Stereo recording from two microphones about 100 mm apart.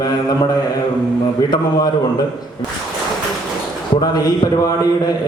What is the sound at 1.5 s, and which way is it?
Speech, 40° left (ahead or behind).